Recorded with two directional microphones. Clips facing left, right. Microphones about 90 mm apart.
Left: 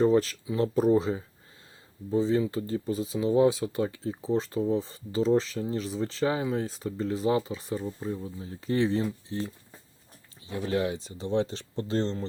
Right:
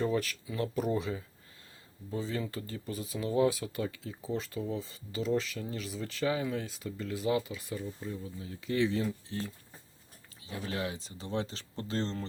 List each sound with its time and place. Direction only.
0.0 s speech: 35° left (ahead or behind)
2.0 s speech: 25° left (ahead or behind)
10.4 s speech: 30° left (ahead or behind)